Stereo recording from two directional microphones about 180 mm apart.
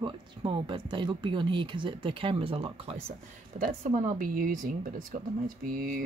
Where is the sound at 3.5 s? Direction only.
45° right (ahead or behind).